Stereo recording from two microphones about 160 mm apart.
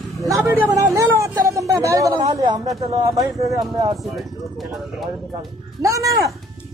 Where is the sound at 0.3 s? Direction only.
20° right (ahead or behind).